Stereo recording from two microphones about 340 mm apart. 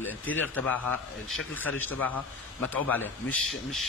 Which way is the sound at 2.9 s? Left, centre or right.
Centre.